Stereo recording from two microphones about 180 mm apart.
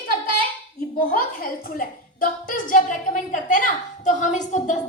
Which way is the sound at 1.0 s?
55° left (ahead or behind).